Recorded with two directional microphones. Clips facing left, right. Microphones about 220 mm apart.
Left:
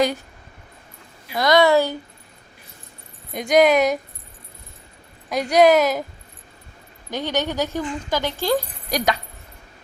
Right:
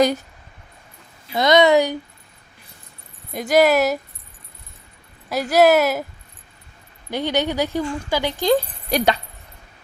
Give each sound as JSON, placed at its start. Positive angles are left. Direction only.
{"t": 1.4, "sound": "speech", "side_deg": -20}
{"t": 3.3, "sound": "speech", "side_deg": -5}
{"t": 5.3, "sound": "speech", "side_deg": -5}
{"t": 7.1, "sound": "speech", "side_deg": -15}